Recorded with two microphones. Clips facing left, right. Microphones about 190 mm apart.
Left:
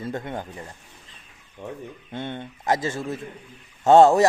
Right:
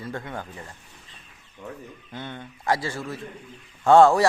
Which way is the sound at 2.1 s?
25° left (ahead or behind).